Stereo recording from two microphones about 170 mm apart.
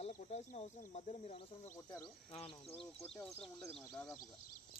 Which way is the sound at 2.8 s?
35° left (ahead or behind).